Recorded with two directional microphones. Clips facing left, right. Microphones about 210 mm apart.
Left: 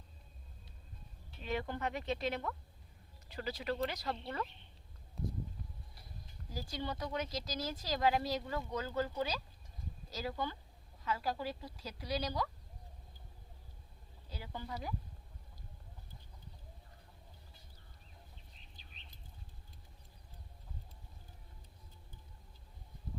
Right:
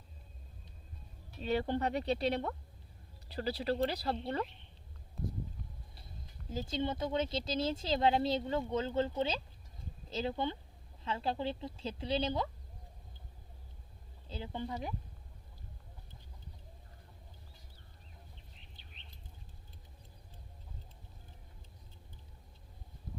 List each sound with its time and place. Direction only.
1.4 s speech: 35° right (ahead or behind)
6.5 s speech: 25° right (ahead or behind)
14.3 s speech: 25° right (ahead or behind)